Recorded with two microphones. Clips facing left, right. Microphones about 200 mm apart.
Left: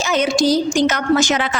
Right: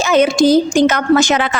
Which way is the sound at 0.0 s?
55° right (ahead or behind).